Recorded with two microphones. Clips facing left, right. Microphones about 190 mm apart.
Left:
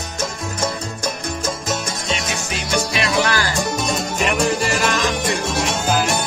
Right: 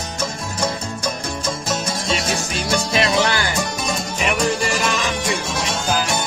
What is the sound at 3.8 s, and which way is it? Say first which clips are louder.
Music: left 2 dB; centre (ahead or behind).